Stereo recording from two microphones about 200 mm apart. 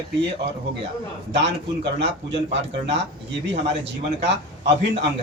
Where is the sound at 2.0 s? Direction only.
60° right (ahead or behind).